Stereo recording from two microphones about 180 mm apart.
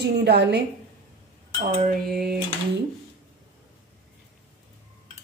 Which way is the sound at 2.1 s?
60° right (ahead or behind).